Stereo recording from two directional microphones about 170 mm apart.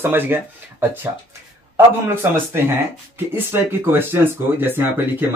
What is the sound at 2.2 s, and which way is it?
Speech, 15° right (ahead or behind).